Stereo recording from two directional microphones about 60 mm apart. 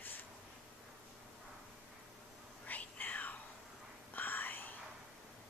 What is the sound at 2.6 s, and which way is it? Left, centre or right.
Whispering, left.